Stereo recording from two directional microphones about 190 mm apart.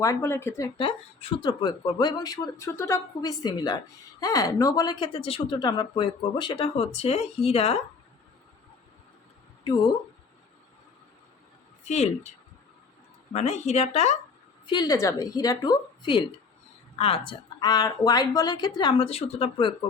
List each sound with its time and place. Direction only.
0.0 s speech: 15° left (ahead or behind)
0.8 s speech: 30° left (ahead or behind)
11.9 s speech: 35° left (ahead or behind)
13.3 s speech: 35° left (ahead or behind)
14.7 s speech: 20° left (ahead or behind)